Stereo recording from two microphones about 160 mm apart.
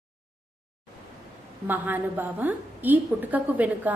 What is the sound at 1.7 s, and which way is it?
A woman's voice, 10° right (ahead or behind).